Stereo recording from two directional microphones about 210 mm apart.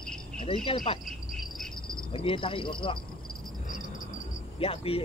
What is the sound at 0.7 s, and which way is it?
Speech, 25° left (ahead or behind).